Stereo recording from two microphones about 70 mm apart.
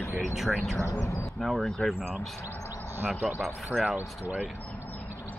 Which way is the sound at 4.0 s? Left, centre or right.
Right.